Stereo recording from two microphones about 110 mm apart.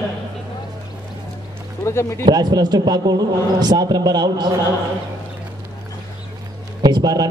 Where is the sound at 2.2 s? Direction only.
40° right (ahead or behind).